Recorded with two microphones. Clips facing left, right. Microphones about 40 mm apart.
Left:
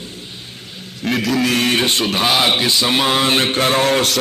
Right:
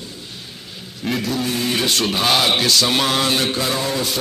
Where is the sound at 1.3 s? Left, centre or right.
Left.